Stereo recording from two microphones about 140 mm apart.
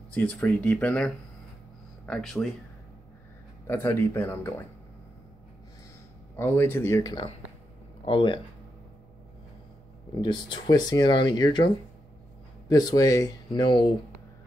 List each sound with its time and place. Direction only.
0.1 s speech: 10° left (ahead or behind)
3.6 s speech: 15° left (ahead or behind)
6.3 s speech: 15° left (ahead or behind); by 8.4 s 35° left (ahead or behind)
10.2 s speech: 35° left (ahead or behind)